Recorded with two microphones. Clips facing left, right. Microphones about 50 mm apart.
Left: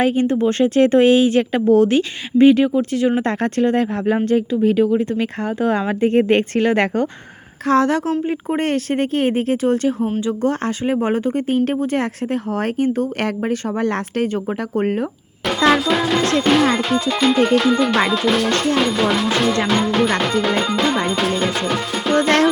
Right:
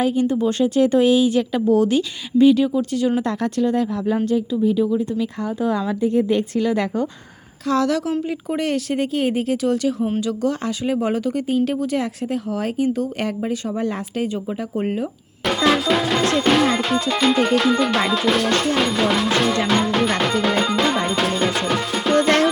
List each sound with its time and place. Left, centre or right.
0.0 s speech: left
7.7 s speech: left
15.4 s music: centre